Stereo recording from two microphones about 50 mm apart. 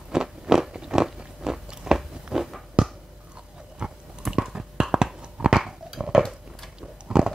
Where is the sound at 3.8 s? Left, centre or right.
Centre.